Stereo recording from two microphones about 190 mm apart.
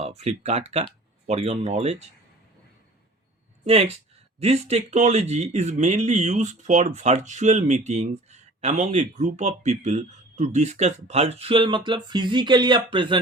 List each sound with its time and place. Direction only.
0.0 s speech: 35° right (ahead or behind)
3.6 s speech: 35° right (ahead or behind)